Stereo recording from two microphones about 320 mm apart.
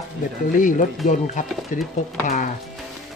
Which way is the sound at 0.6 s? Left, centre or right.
Left.